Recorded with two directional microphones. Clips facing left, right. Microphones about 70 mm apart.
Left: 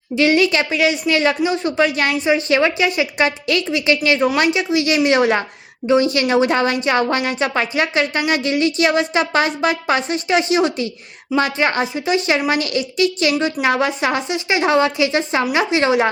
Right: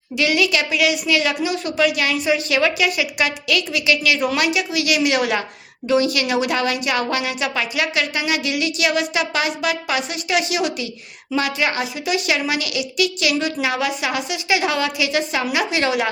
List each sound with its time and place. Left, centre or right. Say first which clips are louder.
0.2 s a woman's voice: left 4 dB; left